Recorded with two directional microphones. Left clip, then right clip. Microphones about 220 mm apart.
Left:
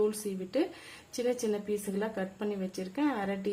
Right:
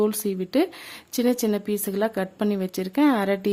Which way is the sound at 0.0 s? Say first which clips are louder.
Right 7 dB; 55° right (ahead or behind).